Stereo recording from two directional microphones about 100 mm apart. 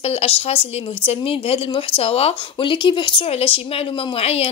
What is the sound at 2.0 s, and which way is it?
A woman's voice, 85° left.